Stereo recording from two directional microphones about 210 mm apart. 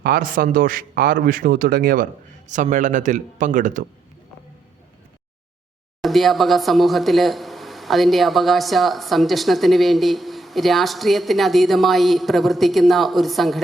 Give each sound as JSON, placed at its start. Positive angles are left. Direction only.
{"t": 0.0, "sound": "a man's voice", "side_deg": -40}
{"t": 6.0, "sound": "speech", "side_deg": 0}